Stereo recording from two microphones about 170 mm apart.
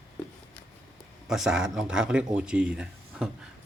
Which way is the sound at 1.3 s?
5° right (ahead or behind).